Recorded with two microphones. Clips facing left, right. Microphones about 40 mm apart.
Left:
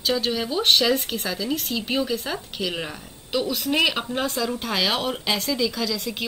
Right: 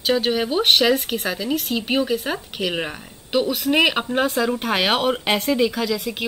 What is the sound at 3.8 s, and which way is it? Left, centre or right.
Speech, right.